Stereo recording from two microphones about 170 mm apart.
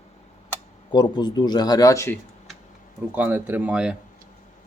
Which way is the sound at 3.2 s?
10° right (ahead or behind).